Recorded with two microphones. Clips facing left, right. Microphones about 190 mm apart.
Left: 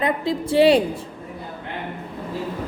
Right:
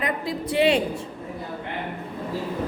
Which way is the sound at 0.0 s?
30° left (ahead or behind).